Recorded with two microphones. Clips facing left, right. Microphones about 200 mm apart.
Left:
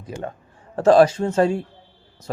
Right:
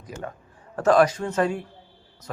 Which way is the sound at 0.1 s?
25° left (ahead or behind).